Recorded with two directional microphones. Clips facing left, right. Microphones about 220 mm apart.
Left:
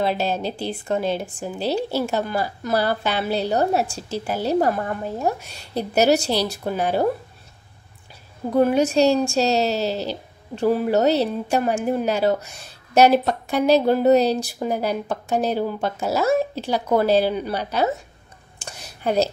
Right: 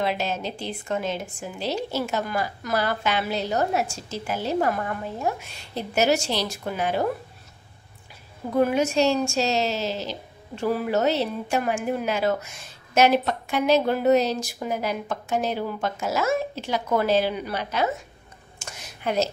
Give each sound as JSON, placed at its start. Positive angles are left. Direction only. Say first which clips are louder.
{"t": 0.0, "sound": "a woman's voice", "louder": "left 4 dB", "side_deg": 35}
{"t": 8.5, "sound": "a woman's voice", "louder": "left 4 dB", "side_deg": 35}
{"t": 18.6, "sound": "a sound", "louder": "left 4 dB", "side_deg": 35}